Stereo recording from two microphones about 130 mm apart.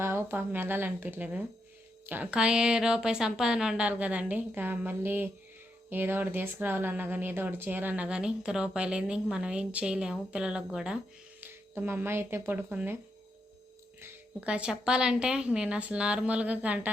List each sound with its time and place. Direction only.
0.0 s speech: 20° right (ahead or behind)
14.0 s speech: 10° right (ahead or behind)